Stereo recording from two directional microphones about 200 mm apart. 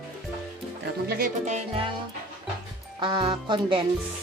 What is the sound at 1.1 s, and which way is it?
Speech, 45° right (ahead or behind).